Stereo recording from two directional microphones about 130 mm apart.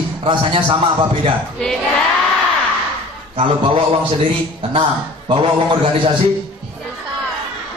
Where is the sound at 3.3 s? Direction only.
45° right (ahead or behind).